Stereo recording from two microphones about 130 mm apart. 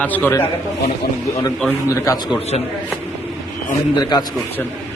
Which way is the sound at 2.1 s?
25° left (ahead or behind).